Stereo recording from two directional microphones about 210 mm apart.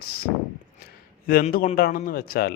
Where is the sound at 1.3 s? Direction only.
45° left (ahead or behind).